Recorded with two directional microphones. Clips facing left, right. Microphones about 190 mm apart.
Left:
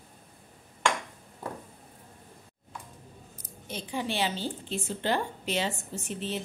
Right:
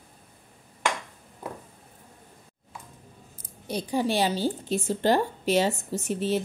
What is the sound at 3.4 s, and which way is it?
A woman's voice, 35° right (ahead or behind).